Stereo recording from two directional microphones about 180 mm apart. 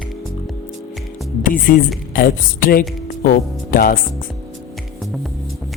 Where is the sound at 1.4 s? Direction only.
50° left (ahead or behind).